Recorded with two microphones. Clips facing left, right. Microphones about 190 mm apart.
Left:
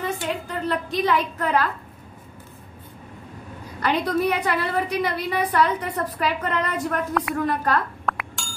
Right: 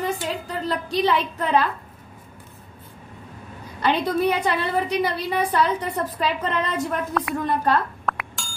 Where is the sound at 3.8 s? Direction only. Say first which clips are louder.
Right 1 dB; 25° right (ahead or behind).